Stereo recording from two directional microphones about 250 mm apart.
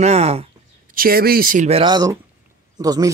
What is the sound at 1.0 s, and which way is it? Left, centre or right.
Speech, right.